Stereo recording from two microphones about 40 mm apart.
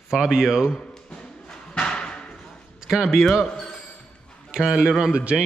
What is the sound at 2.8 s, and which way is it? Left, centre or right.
Speech, centre.